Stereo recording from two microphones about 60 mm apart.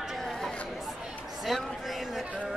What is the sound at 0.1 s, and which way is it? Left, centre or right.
Chatter, centre.